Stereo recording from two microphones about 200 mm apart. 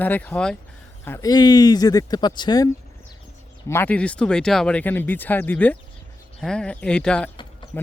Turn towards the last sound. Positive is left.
turn(degrees=5)  # may be behind; listen again after turning